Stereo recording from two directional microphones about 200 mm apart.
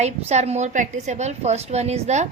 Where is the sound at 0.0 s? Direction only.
35° right (ahead or behind).